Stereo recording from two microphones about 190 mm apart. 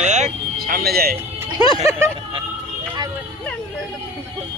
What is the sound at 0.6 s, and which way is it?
Speech, 55° right (ahead or behind).